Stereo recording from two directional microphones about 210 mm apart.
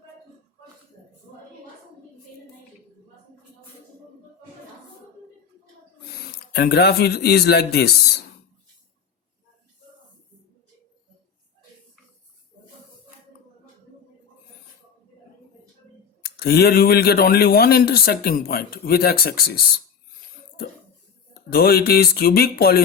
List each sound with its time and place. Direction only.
6.5 s speech: 50° left (ahead or behind)
16.2 s speech: 50° left (ahead or behind)
21.5 s speech: 45° left (ahead or behind)